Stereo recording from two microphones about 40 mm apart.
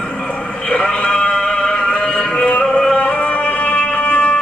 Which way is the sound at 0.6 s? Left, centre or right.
Left.